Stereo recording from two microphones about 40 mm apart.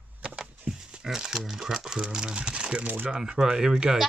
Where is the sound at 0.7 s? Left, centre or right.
Right.